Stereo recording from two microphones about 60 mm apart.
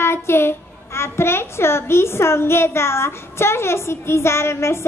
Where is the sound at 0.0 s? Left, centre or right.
Left.